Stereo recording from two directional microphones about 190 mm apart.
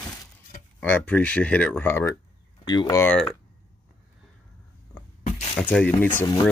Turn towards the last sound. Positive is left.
turn(degrees=10)  # may be behind; listen again after turning